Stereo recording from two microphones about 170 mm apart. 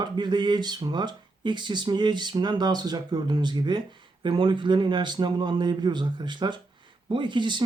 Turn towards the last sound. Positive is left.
turn(degrees=-25)  # may be behind; listen again after turning